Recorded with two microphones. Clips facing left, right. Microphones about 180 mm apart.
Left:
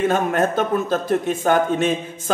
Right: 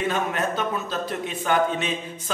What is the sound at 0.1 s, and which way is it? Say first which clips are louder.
Speech: left 7 dB; 45° left (ahead or behind).